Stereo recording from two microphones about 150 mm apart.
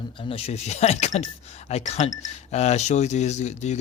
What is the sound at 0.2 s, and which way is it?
Speech, 40° left (ahead or behind).